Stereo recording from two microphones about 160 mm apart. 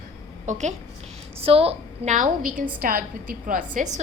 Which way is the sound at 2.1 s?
55° right (ahead or behind).